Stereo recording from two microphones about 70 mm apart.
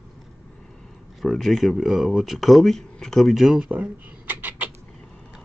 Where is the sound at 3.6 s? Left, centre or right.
Centre.